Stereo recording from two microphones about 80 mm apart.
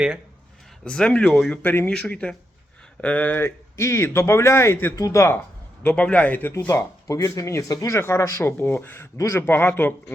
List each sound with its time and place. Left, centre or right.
0.9 s a man's voice: centre
1.6 s speech: left
1.9 s a man's voice: centre
3.8 s speech: left
4.9 s speech: left
5.8 s a man's voice: centre
6.7 s speech: left